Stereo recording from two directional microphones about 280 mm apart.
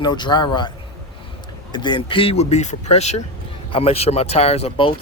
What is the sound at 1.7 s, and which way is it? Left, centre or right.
Speech, centre.